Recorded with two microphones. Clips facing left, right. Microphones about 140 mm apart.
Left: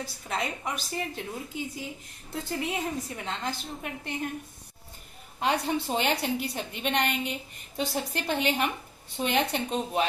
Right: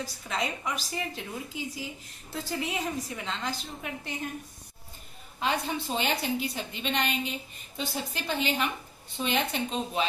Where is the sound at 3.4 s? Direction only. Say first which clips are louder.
Left 1 dB; 50° left (ahead or behind).